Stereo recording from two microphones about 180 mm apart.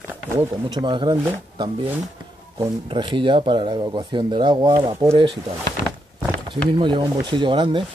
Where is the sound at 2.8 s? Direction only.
25° right (ahead or behind).